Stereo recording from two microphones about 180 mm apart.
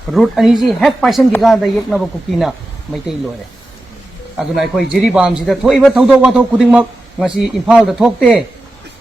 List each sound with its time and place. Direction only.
0.1 s a man's voice: centre (ahead or behind)
4.4 s a man's voice: centre (ahead or behind)